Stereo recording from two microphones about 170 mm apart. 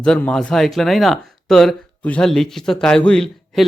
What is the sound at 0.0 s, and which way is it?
Speech, 5° left (ahead or behind).